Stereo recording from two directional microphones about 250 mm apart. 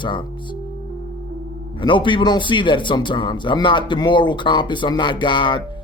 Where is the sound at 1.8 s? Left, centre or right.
Centre.